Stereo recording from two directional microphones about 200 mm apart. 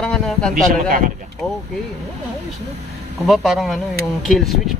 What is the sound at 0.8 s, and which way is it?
Speech, 45° right (ahead or behind).